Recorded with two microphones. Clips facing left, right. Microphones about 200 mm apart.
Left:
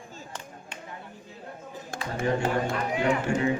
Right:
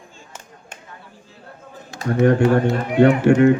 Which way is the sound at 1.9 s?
50° left (ahead or behind).